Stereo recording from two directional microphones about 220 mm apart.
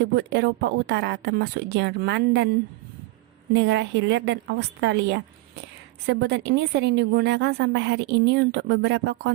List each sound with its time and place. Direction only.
0.0 s a woman's voice: 50° right (ahead or behind)
3.5 s a woman's voice: 50° right (ahead or behind)